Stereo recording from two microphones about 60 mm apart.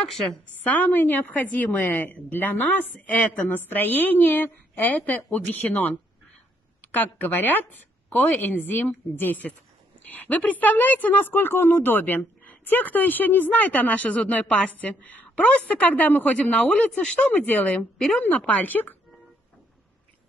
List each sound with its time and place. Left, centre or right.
0.7 s a woman's voice: left; by 17.3 s centre
17.3 s a woman's voice: left